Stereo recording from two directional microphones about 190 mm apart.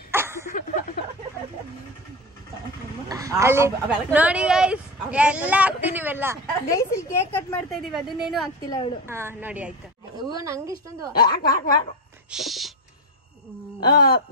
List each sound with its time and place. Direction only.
0.1 s a sound: 15° right (ahead or behind)
0.5 s a sound: 45° left (ahead or behind)
3.1 s speech: 15° right (ahead or behind)
6.4 s a woman's voice: 15° left (ahead or behind)
7.9 s a woman's voice: centre (ahead or behind)
8.6 s a woman's voice: 20° left (ahead or behind)
9.0 s speech: 15° right (ahead or behind)
11.1 s speech: 50° left (ahead or behind)
12.3 s a sound: centre (ahead or behind)
13.7 s speech: 55° left (ahead or behind)